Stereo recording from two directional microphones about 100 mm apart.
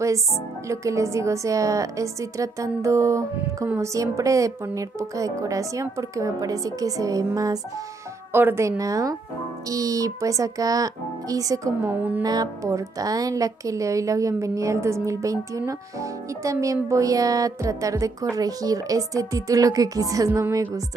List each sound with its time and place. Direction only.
0.7 s speech: 30° right (ahead or behind)
8.3 s speech: 25° right (ahead or behind)
11.9 s music: 20° right (ahead or behind)
12.2 s speech: 40° right (ahead or behind)